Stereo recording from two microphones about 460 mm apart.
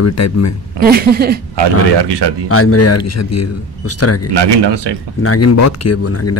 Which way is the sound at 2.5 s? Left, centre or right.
Left.